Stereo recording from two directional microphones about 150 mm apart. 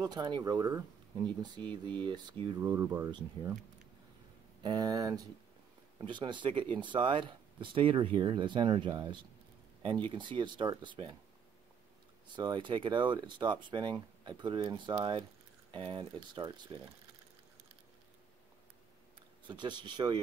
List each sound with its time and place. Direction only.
0.0 s speech: 30° right (ahead or behind)
2.6 s speech: 15° right (ahead or behind)
4.6 s speech: 25° right (ahead or behind)
12.4 s speech: 30° right (ahead or behind)
19.4 s speech: 30° right (ahead or behind)